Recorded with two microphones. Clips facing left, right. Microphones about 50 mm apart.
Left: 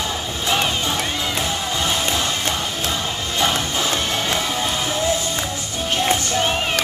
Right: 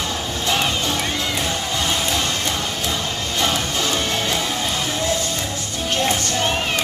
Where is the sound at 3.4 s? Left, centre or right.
Centre.